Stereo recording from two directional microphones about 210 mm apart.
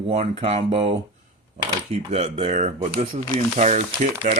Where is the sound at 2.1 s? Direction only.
30° right (ahead or behind).